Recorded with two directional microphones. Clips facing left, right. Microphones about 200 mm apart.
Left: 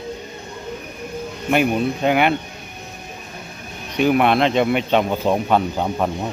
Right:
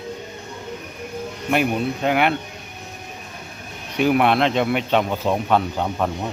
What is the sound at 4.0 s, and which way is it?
Speech, 5° right (ahead or behind).